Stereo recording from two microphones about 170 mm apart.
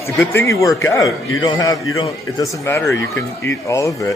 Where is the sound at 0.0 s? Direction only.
15° left (ahead or behind).